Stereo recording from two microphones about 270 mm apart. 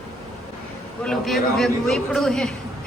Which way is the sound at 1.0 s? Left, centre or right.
Centre.